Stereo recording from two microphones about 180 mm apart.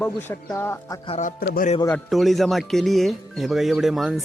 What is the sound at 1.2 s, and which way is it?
Speech, 50° left (ahead or behind).